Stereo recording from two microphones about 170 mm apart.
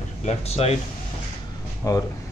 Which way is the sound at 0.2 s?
40° left (ahead or behind).